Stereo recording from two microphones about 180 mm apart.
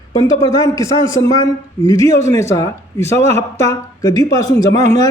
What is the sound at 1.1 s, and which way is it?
Speech, 20° left (ahead or behind).